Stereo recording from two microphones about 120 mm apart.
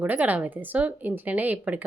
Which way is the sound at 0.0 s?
15° right (ahead or behind).